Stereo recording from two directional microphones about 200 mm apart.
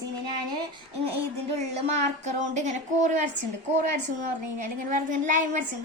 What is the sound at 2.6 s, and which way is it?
A woman's voice, 35° right (ahead or behind).